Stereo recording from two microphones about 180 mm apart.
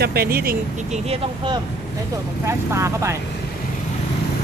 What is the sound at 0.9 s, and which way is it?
Speech, 35° right (ahead or behind).